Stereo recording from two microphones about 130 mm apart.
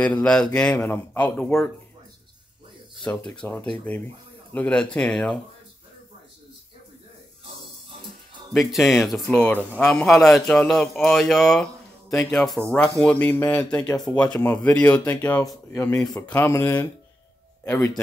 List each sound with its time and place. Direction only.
0.0 s speech: 10° left (ahead or behind)
3.0 s speech: 10° left (ahead or behind)
8.5 s a man's voice: centre (ahead or behind)
16.2 s speech: 15° left (ahead or behind)